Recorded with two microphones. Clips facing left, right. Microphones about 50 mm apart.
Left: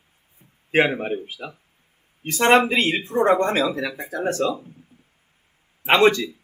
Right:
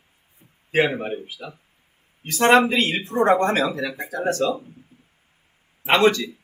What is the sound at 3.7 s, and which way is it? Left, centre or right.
Speech, left.